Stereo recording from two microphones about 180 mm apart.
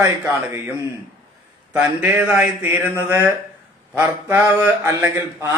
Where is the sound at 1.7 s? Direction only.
10° right (ahead or behind).